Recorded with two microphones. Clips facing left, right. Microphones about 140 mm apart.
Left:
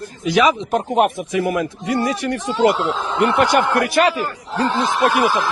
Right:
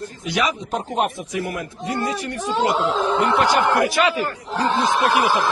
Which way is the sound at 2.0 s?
90° left.